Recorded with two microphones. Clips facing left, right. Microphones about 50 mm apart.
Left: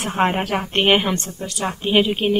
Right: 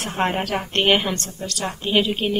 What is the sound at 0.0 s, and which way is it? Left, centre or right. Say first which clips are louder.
A woman's voice: left 3 dB; centre.